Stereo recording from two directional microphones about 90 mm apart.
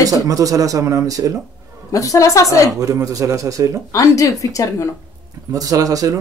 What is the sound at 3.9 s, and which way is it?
Speech, 40° left (ahead or behind).